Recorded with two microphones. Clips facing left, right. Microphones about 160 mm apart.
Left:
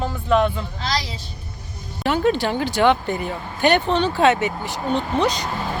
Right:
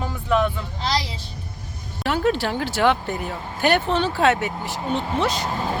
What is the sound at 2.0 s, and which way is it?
Speech, centre (ahead or behind).